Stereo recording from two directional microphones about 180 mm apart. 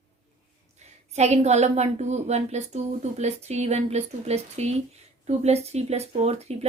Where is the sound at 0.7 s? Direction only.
40° right (ahead or behind).